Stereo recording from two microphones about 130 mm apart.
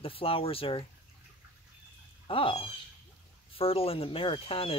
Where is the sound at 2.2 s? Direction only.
45° left (ahead or behind).